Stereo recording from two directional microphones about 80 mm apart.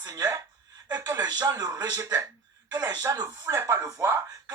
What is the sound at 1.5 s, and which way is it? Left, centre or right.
Speech, right.